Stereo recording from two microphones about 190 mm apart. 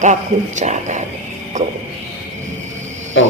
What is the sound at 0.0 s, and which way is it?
Speech, 40° right (ahead or behind).